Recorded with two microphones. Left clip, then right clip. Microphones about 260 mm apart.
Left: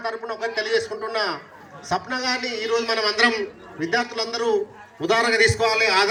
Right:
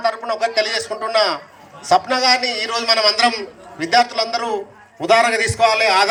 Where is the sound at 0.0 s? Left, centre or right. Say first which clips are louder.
Right 8 dB; right.